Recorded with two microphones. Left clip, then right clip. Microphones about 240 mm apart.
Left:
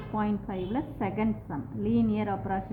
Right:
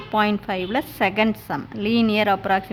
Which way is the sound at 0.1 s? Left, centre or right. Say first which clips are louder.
Right 12 dB; right.